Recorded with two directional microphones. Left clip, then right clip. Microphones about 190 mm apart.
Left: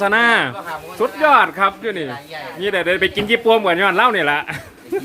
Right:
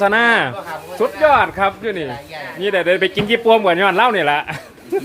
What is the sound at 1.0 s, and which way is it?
Speech, 5° left (ahead or behind).